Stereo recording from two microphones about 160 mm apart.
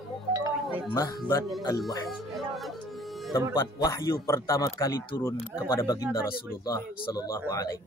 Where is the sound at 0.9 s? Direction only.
20° left (ahead or behind).